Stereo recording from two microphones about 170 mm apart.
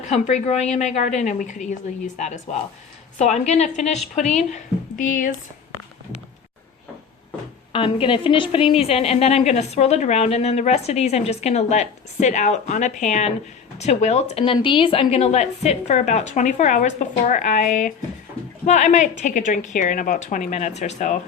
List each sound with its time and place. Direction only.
0.0 s a woman's voice: 45° left (ahead or behind)
7.7 s a woman's voice: 30° left (ahead or behind)